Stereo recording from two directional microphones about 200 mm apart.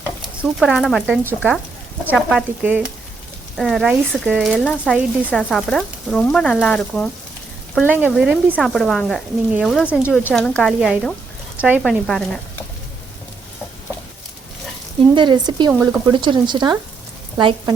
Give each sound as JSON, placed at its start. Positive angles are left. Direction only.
{"t": 0.2, "sound": "speech", "side_deg": 0}
{"t": 7.9, "sound": "speech", "side_deg": -10}
{"t": 15.1, "sound": "speech", "side_deg": -25}